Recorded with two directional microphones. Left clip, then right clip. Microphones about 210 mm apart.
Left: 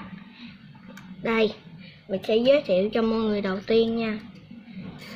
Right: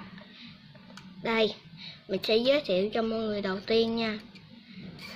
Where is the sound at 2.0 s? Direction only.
25° right (ahead or behind).